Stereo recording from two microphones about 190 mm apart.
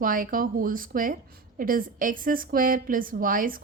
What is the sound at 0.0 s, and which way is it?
Speech, 45° right (ahead or behind).